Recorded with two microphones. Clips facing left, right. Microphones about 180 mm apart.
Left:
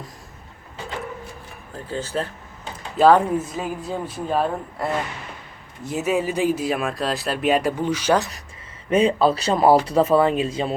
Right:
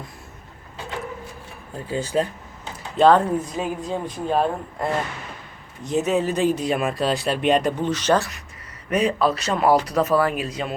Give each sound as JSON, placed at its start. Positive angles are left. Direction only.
{"t": 1.9, "sound": "speech", "side_deg": -15}
{"t": 3.0, "sound": "speech", "side_deg": 10}
{"t": 8.9, "sound": "speech", "side_deg": 30}